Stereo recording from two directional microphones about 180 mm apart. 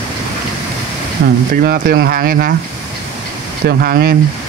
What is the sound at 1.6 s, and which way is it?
Speech, 55° right (ahead or behind).